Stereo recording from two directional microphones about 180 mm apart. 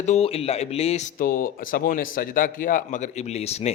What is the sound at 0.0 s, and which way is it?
Speech, 35° left (ahead or behind).